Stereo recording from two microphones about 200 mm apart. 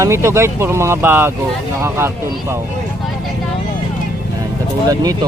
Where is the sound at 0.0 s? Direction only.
15° right (ahead or behind).